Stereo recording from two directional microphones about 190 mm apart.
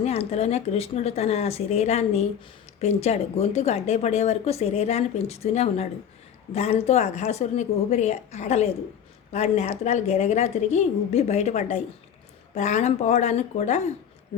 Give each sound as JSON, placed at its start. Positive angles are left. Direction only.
{"t": 0.0, "sound": "speech", "side_deg": 35}